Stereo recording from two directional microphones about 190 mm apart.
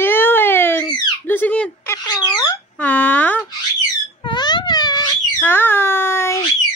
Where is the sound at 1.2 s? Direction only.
10° left (ahead or behind).